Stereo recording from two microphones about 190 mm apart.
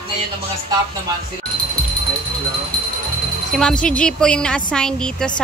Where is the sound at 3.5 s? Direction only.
5° left (ahead or behind).